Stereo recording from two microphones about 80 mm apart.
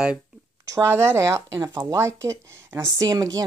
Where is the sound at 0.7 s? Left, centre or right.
Right.